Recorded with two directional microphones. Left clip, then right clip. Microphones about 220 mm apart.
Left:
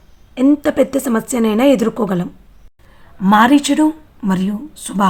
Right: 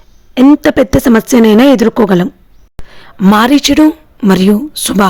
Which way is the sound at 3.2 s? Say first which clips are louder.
Right 3 dB; 45° right (ahead or behind).